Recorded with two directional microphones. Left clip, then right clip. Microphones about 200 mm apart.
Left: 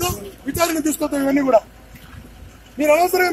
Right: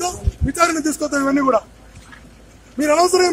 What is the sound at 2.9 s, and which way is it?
Speech, 20° right (ahead or behind).